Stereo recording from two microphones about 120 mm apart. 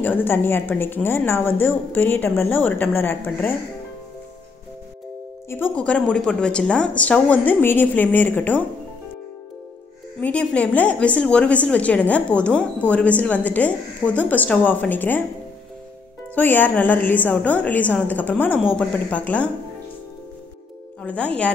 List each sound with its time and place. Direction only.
0.0 s a woman's voice: 15° left (ahead or behind)
5.5 s a woman's voice: 10° left (ahead or behind)
10.2 s a woman's voice: 10° left (ahead or behind)
16.3 s a woman's voice: 15° left (ahead or behind)
21.0 s a woman's voice: 10° left (ahead or behind)